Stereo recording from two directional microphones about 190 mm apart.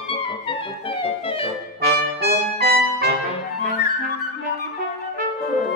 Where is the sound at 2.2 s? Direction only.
55° right (ahead or behind).